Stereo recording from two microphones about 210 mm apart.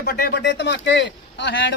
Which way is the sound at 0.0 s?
50° left (ahead or behind).